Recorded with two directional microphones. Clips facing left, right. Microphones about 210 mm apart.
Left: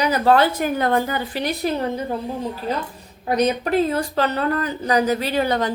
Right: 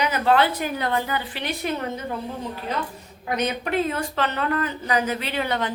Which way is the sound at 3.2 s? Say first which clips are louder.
Left 6 dB; 35° left (ahead or behind).